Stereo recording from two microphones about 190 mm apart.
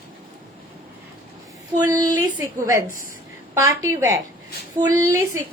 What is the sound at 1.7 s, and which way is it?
A woman's voice, 20° right (ahead or behind).